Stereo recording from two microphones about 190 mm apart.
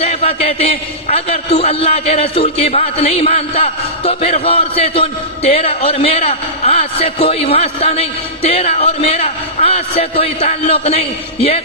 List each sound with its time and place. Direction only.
0.0 s a man's voice: 30° left (ahead or behind)